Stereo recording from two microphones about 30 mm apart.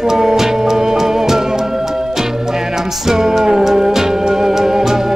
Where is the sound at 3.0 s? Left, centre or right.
Centre.